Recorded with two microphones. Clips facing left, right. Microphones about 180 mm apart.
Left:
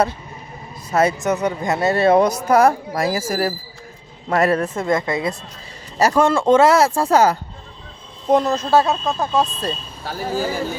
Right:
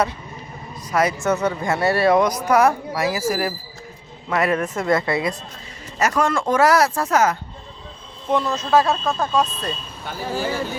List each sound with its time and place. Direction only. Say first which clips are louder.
0.9 s speech: left 2 dB; 25° left (ahead or behind)
2.9 s speech: left 1 dB; 45° left (ahead or behind); by 7.3 s 30° left (ahead or behind)
8.3 s speech: left 5 dB; 40° left (ahead or behind)
8.7 s speech: even; 20° left (ahead or behind)
9.4 s speech: left 2 dB; 35° left (ahead or behind)